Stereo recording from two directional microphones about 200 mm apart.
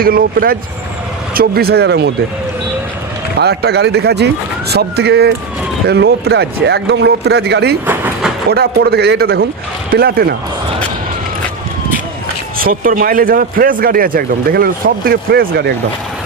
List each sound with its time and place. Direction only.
0.0 s a man's voice: 45° right (ahead or behind)
3.3 s a man's voice: 55° right (ahead or behind)
7.9 s vehicle: 10° right (ahead or behind)
8.4 s a man's voice: 50° right (ahead or behind)
12.5 s a man's voice: 45° right (ahead or behind)